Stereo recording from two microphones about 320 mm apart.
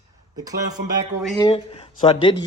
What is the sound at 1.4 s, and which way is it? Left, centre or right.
Speech, centre.